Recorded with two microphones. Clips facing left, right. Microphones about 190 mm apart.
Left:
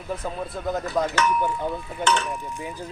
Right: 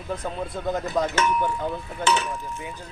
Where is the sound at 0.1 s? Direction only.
5° left (ahead or behind).